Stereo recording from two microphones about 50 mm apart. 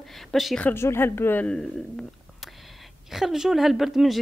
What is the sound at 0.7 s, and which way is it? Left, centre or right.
Speech, left.